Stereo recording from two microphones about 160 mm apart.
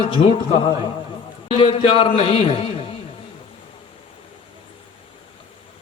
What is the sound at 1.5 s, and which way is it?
A man's voice, 35° left (ahead or behind).